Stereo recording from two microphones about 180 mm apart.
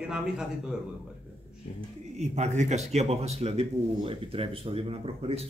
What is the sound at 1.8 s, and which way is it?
Speech, 40° right (ahead or behind).